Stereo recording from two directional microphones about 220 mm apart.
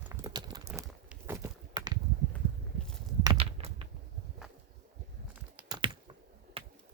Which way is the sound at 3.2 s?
25° right (ahead or behind).